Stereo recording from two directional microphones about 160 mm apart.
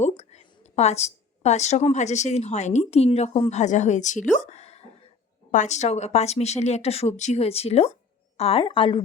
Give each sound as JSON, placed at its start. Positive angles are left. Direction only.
{"t": 0.2, "sound": "a woman's voice", "side_deg": 40}